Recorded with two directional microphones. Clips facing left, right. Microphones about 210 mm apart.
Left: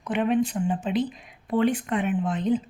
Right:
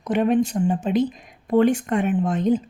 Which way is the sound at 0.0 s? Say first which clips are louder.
Right 4 dB; 40° right (ahead or behind).